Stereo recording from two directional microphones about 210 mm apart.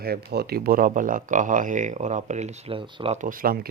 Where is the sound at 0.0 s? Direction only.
50° right (ahead or behind); by 3.2 s 25° right (ahead or behind).